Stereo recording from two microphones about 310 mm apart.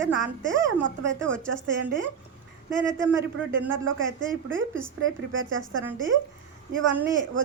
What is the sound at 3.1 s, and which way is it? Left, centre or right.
A man's voice, right.